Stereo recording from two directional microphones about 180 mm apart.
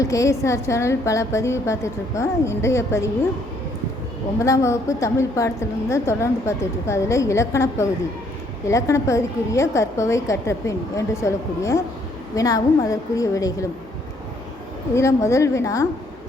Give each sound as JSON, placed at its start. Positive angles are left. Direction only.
{"t": 0.0, "sound": "a woman's voice", "side_deg": 15}
{"t": 4.4, "sound": "a woman's voice", "side_deg": 15}
{"t": 14.9, "sound": "a woman's voice", "side_deg": 15}